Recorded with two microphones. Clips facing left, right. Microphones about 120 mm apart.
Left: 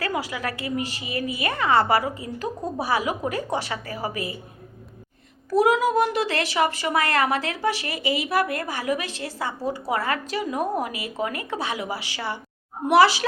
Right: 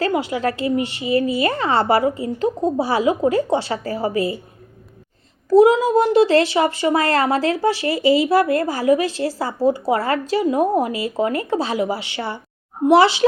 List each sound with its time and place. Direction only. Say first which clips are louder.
0.0 s a woman's voice: right 8 dB; 25° right (ahead or behind)
5.5 s a woman's voice: right 7 dB; 25° right (ahead or behind)